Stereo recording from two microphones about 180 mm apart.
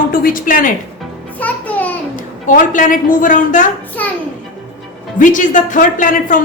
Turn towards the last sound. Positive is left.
turn(degrees=50)  # may be behind; listen again after turning